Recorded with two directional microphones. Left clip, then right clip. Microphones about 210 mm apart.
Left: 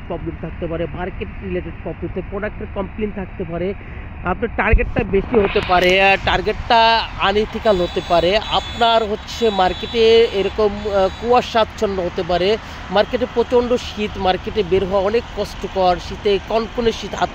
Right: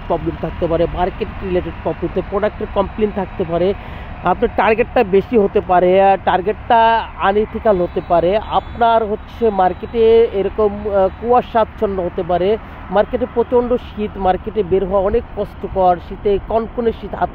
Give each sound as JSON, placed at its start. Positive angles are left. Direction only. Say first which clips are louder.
{"t": 0.7, "sound": "speech", "louder": "right 8 dB", "side_deg": -25}
{"t": 5.7, "sound": "speech", "louder": "right 2 dB", "side_deg": -5}